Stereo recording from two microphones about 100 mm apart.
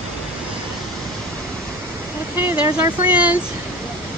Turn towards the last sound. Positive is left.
turn(degrees=-15)  # may be behind; listen again after turning